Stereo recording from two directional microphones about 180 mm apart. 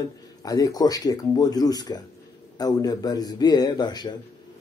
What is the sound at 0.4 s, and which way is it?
Speech, 20° left (ahead or behind).